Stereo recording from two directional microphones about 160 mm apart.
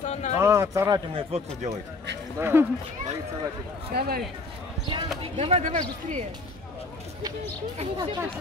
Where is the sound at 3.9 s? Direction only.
80° right.